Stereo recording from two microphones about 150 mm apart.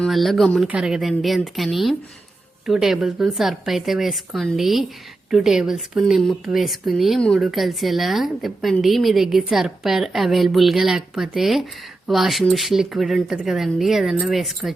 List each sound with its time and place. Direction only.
0.0 s speech: centre (ahead or behind)